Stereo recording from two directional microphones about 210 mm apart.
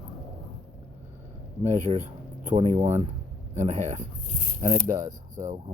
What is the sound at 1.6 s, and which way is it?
Speech, 35° right (ahead or behind).